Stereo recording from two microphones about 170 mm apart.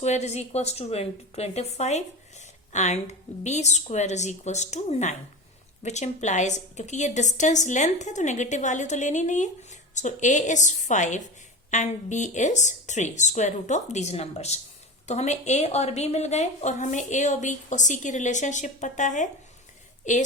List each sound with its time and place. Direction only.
0.0 s a woman's voice: 40° left (ahead or behind)